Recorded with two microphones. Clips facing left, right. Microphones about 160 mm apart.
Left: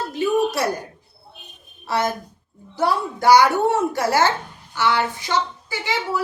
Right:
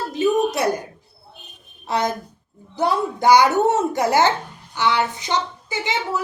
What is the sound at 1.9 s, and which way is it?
A woman's voice, 20° right (ahead or behind).